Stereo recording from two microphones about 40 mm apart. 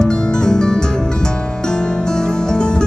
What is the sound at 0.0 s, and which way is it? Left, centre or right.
Music, centre.